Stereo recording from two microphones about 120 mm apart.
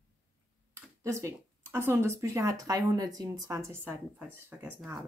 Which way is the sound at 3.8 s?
15° right (ahead or behind).